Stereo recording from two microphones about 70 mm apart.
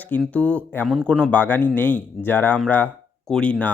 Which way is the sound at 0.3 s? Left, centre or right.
Centre.